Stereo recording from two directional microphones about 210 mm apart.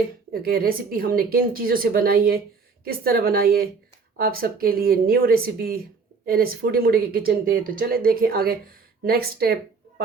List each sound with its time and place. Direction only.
0.3 s speech: 45° right (ahead or behind)